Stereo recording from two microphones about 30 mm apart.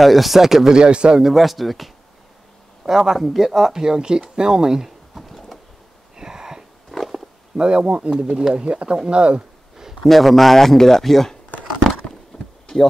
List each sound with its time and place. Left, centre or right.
0.0 s speech: centre
0.7 s speech: right
1.2 s speech: centre
2.8 s speech: right
3.2 s speech: centre
3.8 s speech: right
5.1 s a sound: centre
6.1 s a sound: right
7.0 s wild animals: centre
7.5 s speech: right
8.4 s speech: right
8.6 s speech: right
10.0 s speech: centre
12.3 s a sound: left